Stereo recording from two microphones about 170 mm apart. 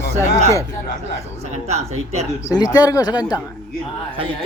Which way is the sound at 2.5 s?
25° left (ahead or behind).